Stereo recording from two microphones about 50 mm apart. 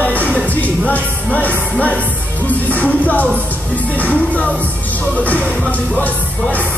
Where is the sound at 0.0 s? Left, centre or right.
Left.